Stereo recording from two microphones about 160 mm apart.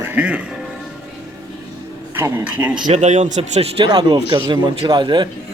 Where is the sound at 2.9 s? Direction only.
45° right (ahead or behind); by 5.3 s 30° right (ahead or behind).